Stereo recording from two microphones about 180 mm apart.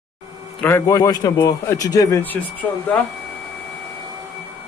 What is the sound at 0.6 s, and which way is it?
A man's voice, 15° left (ahead or behind).